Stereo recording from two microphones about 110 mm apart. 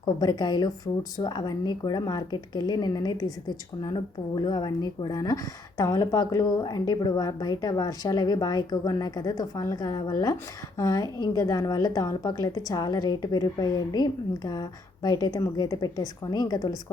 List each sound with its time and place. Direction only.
0.0 s a woman's voice: 40° left (ahead or behind)